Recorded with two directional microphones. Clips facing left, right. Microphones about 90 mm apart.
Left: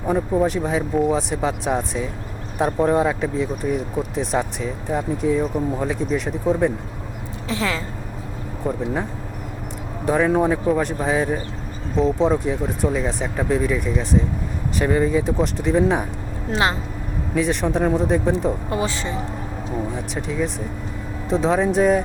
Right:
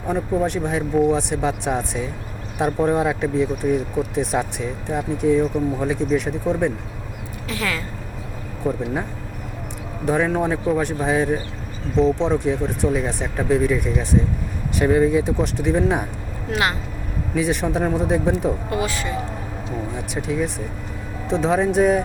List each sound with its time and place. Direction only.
0.1 s speech: centre (ahead or behind)
7.4 s speech: 25° left (ahead or behind)
8.7 s speech: centre (ahead or behind)
10.1 s speech: centre (ahead or behind)
16.5 s speech: 25° left (ahead or behind)
17.3 s speech: centre (ahead or behind)
18.7 s speech: 25° left (ahead or behind)
20.1 s speech: 5° right (ahead or behind)